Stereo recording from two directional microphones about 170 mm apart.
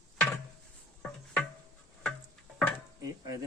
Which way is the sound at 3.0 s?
20° right (ahead or behind).